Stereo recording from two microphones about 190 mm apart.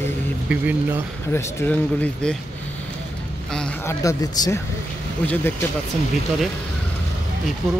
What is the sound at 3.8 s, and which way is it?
Speech, 15° left (ahead or behind).